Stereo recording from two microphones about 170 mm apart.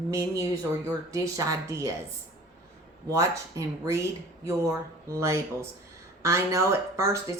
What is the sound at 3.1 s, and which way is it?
Speech, 15° right (ahead or behind).